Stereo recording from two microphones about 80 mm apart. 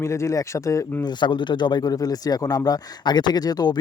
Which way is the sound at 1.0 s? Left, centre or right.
Left.